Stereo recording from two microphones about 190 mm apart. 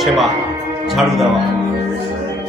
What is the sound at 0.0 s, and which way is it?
Speech, centre (ahead or behind).